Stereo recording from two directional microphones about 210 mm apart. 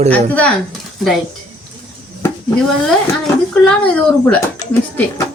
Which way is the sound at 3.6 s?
5° left (ahead or behind).